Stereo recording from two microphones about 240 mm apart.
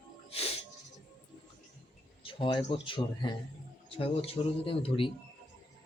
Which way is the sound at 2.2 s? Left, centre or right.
Left.